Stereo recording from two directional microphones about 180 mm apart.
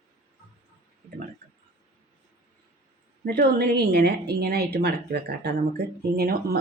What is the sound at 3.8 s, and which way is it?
Speech, 65° right (ahead or behind).